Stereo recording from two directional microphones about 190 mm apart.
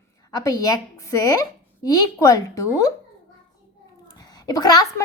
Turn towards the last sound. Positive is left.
turn(degrees=20)  # may be behind; listen again after turning